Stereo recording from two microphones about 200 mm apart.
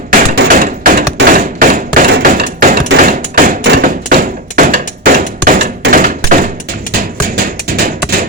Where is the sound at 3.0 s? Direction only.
45° right (ahead or behind).